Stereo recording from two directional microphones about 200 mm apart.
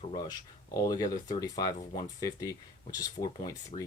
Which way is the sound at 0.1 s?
20° left (ahead or behind).